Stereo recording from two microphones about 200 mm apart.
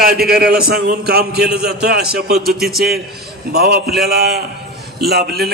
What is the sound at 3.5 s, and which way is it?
A man's voice, 50° right (ahead or behind).